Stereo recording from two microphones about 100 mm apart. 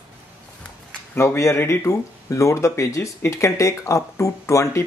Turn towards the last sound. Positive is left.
turn(degrees=30)  # may be behind; listen again after turning